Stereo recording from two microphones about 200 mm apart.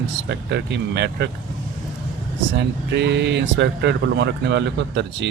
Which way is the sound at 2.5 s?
60° right (ahead or behind).